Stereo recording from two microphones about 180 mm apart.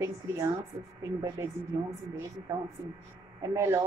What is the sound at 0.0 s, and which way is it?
A woman's voice, 15° right (ahead or behind).